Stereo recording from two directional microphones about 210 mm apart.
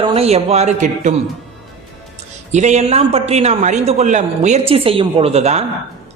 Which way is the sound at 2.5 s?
35° right (ahead or behind).